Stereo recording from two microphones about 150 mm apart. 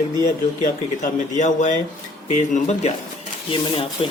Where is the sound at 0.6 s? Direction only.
55° left (ahead or behind).